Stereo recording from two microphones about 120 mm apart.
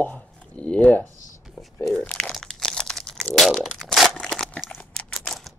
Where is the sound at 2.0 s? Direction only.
10° left (ahead or behind).